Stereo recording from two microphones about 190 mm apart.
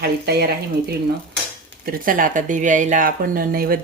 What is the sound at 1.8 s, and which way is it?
Speech, 45° right (ahead or behind).